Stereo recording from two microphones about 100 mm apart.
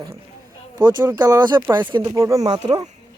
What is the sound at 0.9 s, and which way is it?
Speech, 45° right (ahead or behind).